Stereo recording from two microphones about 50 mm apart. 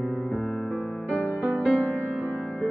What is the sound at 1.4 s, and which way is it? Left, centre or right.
Music, right.